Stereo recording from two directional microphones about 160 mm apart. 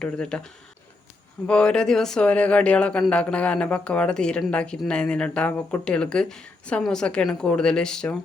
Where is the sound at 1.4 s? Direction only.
5° left (ahead or behind).